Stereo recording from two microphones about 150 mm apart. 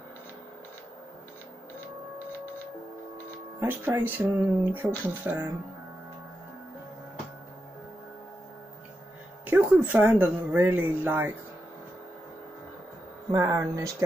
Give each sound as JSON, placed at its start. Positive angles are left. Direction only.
{"t": 3.5, "sound": "speech", "side_deg": -15}
{"t": 9.5, "sound": "speech", "side_deg": -10}
{"t": 13.3, "sound": "speech", "side_deg": -25}